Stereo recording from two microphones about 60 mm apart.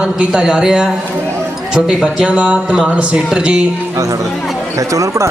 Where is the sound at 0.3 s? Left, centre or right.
Centre.